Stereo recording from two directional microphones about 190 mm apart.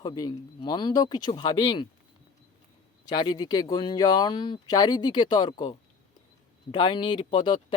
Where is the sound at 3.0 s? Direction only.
20° left (ahead or behind).